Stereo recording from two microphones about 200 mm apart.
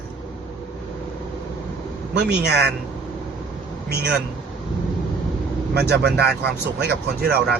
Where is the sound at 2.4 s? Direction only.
55° right (ahead or behind).